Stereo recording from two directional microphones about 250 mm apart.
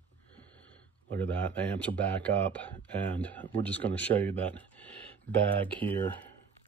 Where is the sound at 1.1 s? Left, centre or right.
Centre.